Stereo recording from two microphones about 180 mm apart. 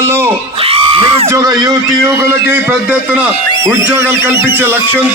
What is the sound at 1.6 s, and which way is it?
A man's voice, 15° right (ahead or behind).